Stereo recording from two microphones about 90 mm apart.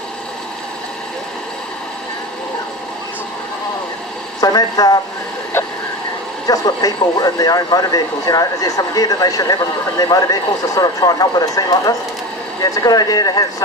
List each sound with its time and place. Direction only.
4.4 s speech: 45° left (ahead or behind)
6.5 s speech: 45° left (ahead or behind)